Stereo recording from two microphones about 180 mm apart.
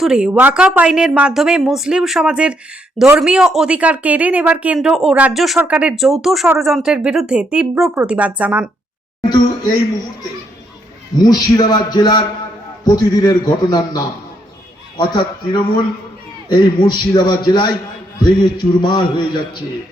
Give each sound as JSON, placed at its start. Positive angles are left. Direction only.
{"t": 0.0, "sound": "speech", "side_deg": -5}
{"t": 11.2, "sound": "a man's voice", "side_deg": 20}